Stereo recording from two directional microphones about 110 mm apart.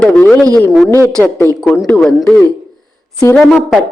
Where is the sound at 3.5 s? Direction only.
Centre (ahead or behind).